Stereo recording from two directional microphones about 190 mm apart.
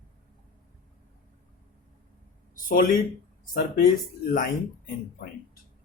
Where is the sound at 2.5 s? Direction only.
45° left (ahead or behind).